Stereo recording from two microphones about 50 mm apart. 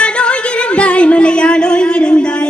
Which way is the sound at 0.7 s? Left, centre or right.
Left.